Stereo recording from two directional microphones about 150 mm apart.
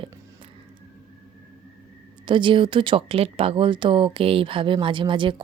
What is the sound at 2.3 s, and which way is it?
Speech, 35° right (ahead or behind).